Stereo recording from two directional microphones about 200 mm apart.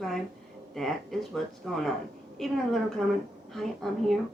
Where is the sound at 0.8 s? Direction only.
Centre (ahead or behind).